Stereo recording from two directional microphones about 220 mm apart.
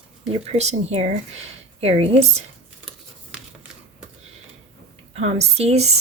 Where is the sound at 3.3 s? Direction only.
5° right (ahead or behind).